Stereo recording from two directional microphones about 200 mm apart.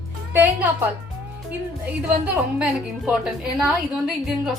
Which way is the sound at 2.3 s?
5° right (ahead or behind).